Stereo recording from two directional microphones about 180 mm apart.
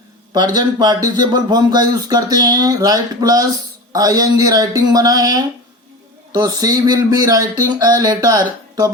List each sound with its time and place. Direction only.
0.3 s speech: 25° right (ahead or behind)